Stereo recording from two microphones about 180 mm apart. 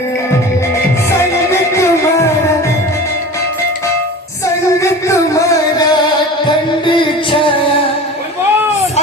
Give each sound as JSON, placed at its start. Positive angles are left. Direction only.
{"t": 1.2, "sound": "music", "side_deg": 15}
{"t": 4.8, "sound": "music", "side_deg": 20}